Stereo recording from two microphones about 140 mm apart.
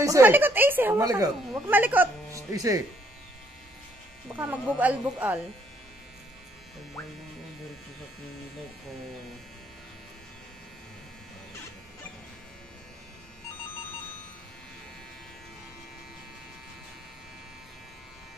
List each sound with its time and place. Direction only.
0.0 s speech: 25° right (ahead or behind)
1.0 s speech: 25° right (ahead or behind)
1.7 s speech: 15° right (ahead or behind)
2.5 s speech: 25° right (ahead or behind)
4.4 s speech: 10° right (ahead or behind)